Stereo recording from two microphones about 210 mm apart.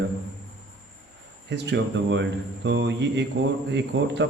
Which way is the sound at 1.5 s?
60° right (ahead or behind).